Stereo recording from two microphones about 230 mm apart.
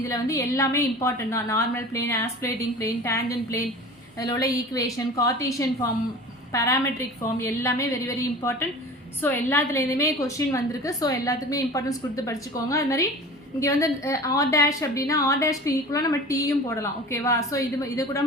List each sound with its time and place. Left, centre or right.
0.1 s a woman's voice: centre
9.2 s a woman's voice: centre